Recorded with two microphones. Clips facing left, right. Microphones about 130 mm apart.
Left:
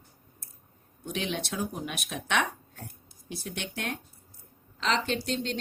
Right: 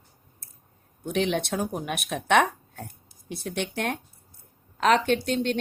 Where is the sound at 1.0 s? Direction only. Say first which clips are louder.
Right 7 dB; 55° right (ahead or behind).